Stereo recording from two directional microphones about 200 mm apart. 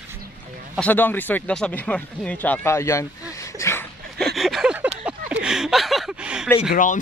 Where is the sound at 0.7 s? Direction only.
5° left (ahead or behind).